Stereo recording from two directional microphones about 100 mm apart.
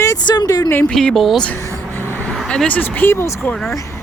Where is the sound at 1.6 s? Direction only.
25° left (ahead or behind).